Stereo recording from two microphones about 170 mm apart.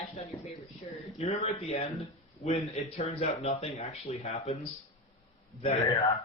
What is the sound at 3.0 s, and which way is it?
A man's voice, 40° left (ahead or behind).